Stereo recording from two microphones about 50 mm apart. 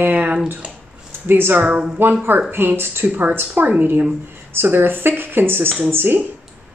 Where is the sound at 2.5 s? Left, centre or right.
Right.